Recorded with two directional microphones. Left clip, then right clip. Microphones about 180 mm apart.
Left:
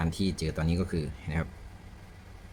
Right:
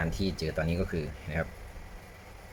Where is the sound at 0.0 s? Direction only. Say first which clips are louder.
Even; 20° left (ahead or behind).